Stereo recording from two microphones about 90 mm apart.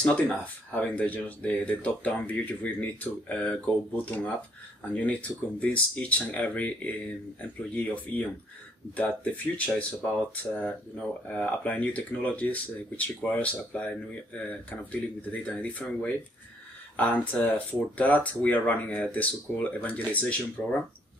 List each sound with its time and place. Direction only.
0.0 s speech: 15° left (ahead or behind)